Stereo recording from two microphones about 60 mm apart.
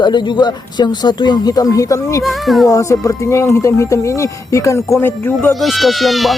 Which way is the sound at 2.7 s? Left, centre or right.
Left.